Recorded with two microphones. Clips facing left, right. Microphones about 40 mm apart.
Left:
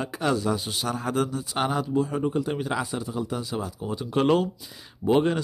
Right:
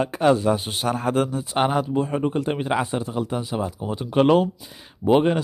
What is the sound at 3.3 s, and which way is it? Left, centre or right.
Speech, right.